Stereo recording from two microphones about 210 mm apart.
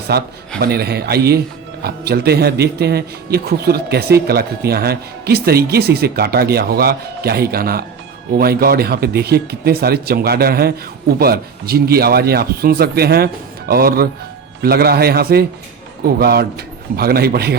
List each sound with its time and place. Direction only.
0.1 s speech: 50° right (ahead or behind)